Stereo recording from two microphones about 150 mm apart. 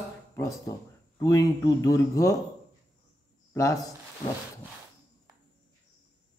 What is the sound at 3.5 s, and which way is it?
Speech, 20° left (ahead or behind).